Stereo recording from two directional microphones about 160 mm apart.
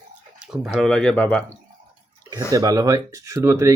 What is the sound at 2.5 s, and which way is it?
Speech, 20° right (ahead or behind).